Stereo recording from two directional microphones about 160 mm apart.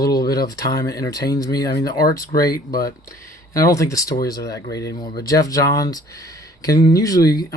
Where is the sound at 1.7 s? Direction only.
80° left.